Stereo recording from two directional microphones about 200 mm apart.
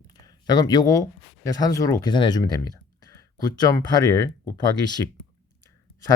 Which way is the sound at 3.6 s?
20° left (ahead or behind).